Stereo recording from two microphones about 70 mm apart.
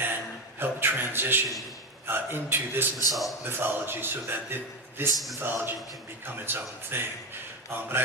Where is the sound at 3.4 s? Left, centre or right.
Right.